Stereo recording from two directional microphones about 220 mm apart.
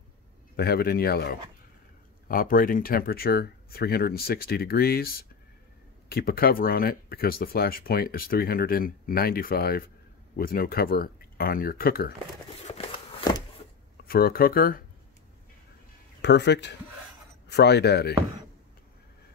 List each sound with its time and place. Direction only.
0.6 s speech: 45° left (ahead or behind)
12.6 s a sound: 25° left (ahead or behind)
14.0 s speech: 40° left (ahead or behind)
16.2 s speech: 50° left (ahead or behind)